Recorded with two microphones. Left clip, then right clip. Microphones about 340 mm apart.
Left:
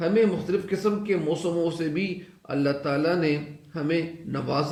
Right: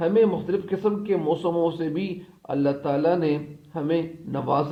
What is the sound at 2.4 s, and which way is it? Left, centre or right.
A man's voice, centre.